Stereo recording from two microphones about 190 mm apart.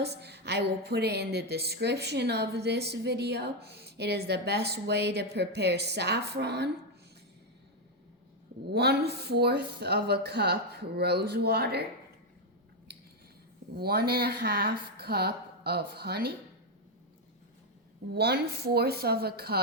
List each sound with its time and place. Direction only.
0.0 s a woman's voice: 60° right (ahead or behind)
8.7 s a woman's voice: 60° right (ahead or behind)
13.7 s a woman's voice: 55° right (ahead or behind)
18.1 s a woman's voice: 60° right (ahead or behind)